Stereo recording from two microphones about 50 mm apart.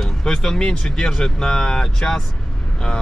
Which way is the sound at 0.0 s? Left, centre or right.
Centre.